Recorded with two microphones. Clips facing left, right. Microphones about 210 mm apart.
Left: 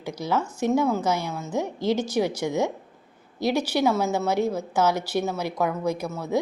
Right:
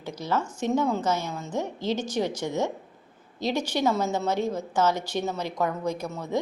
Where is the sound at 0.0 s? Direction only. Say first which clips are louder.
Left 2 dB; 10° left (ahead or behind).